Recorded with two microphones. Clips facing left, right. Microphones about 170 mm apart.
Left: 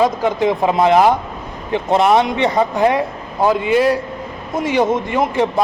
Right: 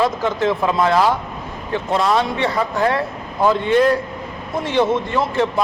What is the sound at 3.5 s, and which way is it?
A man's voice, 10° left (ahead or behind).